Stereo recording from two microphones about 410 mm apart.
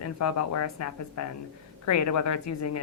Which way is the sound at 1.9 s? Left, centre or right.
Left.